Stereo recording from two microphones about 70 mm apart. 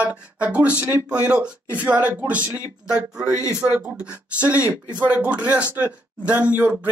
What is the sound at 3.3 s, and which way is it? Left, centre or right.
Speech, left.